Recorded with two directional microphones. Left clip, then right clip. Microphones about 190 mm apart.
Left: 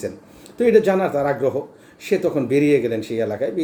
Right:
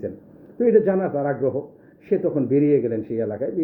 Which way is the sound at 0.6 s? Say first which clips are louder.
Left 2 dB; 20° left (ahead or behind).